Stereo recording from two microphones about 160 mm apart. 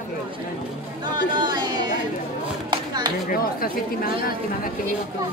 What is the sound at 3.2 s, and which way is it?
Speech, 65° left (ahead or behind).